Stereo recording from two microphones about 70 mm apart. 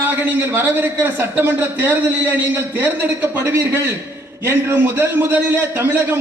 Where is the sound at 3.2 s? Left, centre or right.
Right.